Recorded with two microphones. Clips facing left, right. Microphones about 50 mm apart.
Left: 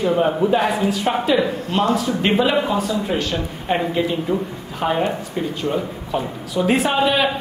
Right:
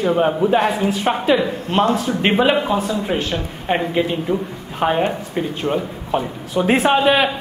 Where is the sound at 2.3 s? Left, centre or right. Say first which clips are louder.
Right 2 dB; right.